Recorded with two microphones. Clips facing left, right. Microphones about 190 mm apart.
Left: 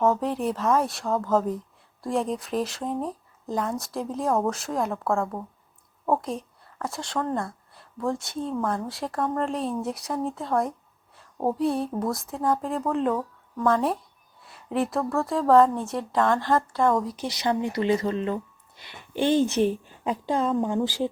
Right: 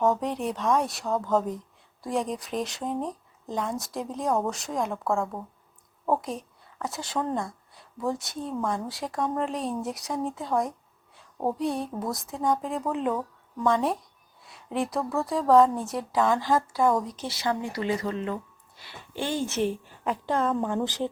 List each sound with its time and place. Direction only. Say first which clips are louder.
0.0 s a woman's voice: left 2 dB; centre (ahead or behind)
17.2 s a woman's voice: left 3 dB; 20° left (ahead or behind)